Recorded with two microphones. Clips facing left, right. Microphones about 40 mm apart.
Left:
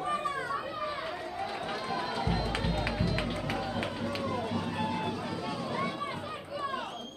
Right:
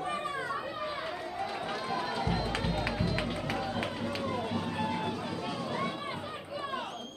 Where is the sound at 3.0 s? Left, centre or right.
Centre.